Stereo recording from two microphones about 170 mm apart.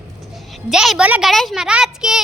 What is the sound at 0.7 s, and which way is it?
A child's voice, 5° right (ahead or behind).